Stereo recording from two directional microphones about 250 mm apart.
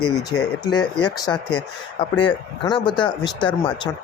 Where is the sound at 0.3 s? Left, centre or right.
Centre.